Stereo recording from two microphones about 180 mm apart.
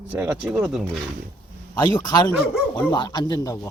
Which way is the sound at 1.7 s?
20° left (ahead or behind).